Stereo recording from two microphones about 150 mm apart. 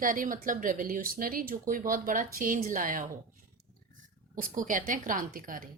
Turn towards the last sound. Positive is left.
turn(degrees=-65)  # may be behind; listen again after turning